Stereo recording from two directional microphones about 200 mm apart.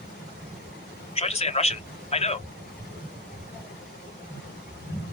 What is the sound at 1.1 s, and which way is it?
Speech, 30° left (ahead or behind).